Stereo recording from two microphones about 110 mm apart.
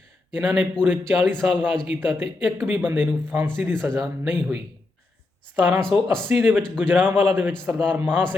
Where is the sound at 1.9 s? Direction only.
15° right (ahead or behind).